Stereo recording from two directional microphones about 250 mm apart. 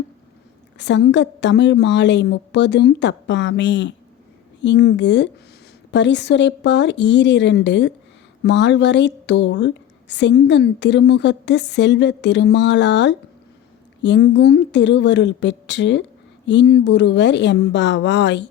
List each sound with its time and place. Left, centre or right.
0.8 s a woman's voice: left